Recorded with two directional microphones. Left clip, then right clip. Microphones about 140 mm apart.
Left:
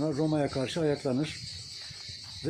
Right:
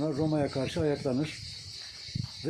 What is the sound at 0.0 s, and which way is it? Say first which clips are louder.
Speech: left 1 dB; 20° left (ahead or behind).